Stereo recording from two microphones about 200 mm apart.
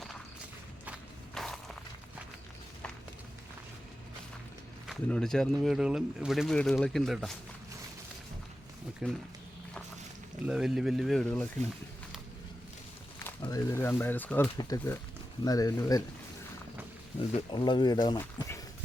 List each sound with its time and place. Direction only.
0.9 s walk: centre (ahead or behind)
4.9 s speech: 5° left (ahead or behind)
9.0 s speech: 5° right (ahead or behind)
10.4 s speech: 5° right (ahead or behind)
13.4 s speech: 15° left (ahead or behind)
17.3 s speech: 25° left (ahead or behind)